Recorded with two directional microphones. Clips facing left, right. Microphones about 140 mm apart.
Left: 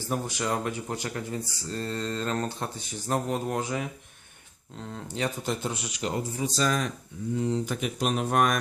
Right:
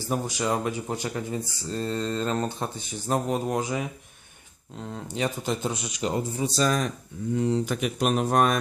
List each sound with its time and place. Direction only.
0.1 s speech: 15° right (ahead or behind); by 6.9 s 40° right (ahead or behind)
7.3 s speech: 70° right (ahead or behind); by 8.5 s 35° right (ahead or behind)